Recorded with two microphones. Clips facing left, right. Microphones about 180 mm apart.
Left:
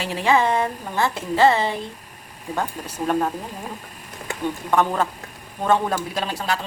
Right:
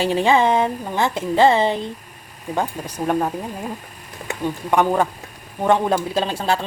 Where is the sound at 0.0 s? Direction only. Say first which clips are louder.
Right 3 dB; 30° right (ahead or behind).